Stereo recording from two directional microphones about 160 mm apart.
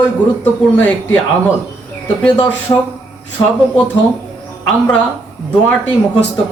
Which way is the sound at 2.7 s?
20° left (ahead or behind).